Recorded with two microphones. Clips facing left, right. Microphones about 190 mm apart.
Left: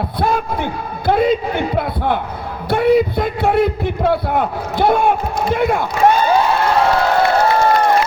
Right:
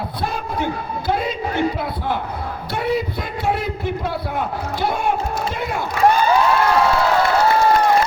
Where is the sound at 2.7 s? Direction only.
55° left (ahead or behind).